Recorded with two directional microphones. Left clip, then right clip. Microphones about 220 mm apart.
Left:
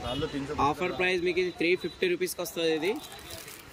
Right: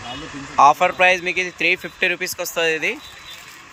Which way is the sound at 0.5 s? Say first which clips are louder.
Right 16 dB; centre (ahead or behind).